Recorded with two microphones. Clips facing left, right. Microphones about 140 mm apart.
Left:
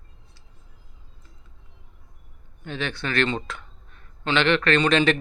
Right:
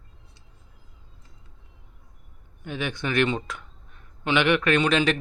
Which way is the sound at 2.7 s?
15° right (ahead or behind).